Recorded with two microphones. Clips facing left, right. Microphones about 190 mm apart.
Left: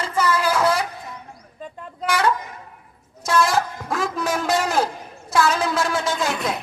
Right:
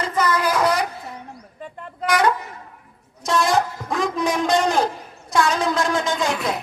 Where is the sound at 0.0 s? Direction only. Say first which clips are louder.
Even; 10° left (ahead or behind).